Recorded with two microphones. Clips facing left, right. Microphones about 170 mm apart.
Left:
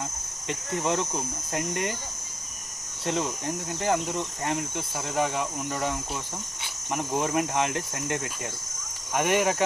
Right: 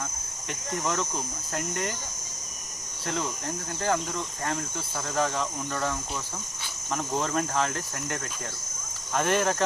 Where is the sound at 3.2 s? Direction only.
15° left (ahead or behind).